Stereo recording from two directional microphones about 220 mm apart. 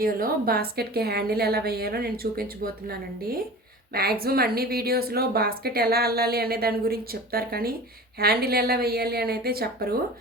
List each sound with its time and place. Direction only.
0.0 s a woman's voice: 40° right (ahead or behind)
3.9 s a woman's voice: 45° right (ahead or behind)